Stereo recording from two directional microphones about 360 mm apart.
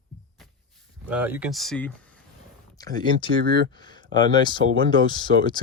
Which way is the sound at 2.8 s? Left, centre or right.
Centre.